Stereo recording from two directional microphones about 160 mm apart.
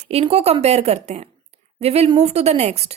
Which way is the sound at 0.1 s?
40° right (ahead or behind).